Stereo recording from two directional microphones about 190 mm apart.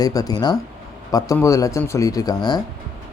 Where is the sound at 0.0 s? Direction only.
20° left (ahead or behind).